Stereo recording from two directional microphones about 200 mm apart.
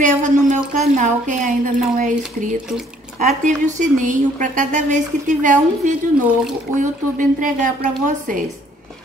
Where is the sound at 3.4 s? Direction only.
40° right (ahead or behind).